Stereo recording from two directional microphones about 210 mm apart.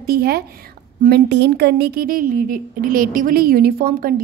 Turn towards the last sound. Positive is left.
turn(degrees=-45)  # may be behind; listen again after turning